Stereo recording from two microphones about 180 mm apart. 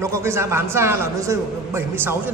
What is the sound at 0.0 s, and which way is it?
A man's voice, 15° right (ahead or behind).